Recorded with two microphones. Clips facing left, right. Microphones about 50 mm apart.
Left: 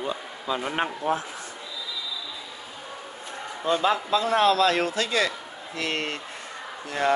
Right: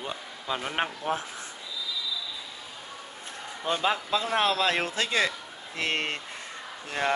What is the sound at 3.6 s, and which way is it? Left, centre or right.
Speech, centre.